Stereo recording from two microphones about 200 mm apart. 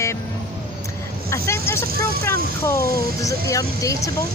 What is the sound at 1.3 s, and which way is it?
A woman's voice, 15° left (ahead or behind).